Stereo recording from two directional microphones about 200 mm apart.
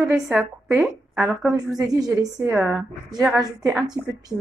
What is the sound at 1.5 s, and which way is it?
A woman's voice, 20° right (ahead or behind).